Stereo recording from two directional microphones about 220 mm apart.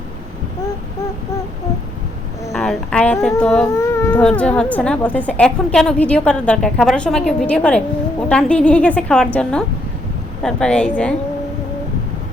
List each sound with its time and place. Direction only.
2.5 s speech: centre (ahead or behind)